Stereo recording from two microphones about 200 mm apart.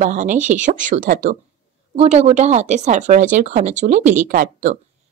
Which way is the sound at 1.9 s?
30° right (ahead or behind).